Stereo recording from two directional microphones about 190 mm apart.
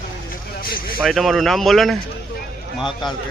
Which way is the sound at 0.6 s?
50° left (ahead or behind).